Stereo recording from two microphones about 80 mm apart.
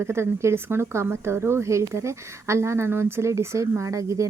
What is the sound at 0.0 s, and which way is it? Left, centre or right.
A woman's voice, right.